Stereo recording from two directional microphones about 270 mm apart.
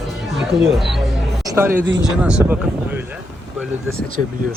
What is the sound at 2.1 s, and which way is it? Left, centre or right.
Speech, centre.